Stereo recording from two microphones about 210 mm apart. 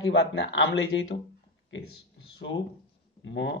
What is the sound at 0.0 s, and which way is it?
Speech, 60° left (ahead or behind).